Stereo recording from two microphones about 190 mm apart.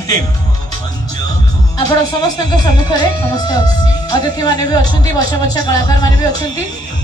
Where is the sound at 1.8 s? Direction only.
20° left (ahead or behind).